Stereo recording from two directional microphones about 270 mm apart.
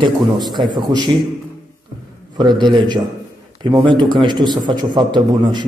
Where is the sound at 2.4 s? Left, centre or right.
Centre.